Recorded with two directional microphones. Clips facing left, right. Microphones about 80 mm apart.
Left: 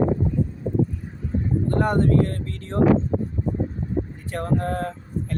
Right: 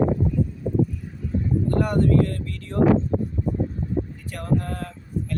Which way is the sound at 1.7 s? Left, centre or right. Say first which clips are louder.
Left 1 dB; left.